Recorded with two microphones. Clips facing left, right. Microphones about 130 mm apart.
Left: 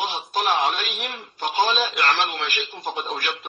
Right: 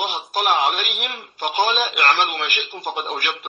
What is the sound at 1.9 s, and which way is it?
Speech, 60° right (ahead or behind).